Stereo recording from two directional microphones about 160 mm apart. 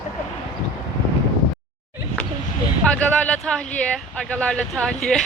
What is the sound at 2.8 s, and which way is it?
Speech, 5° left (ahead or behind).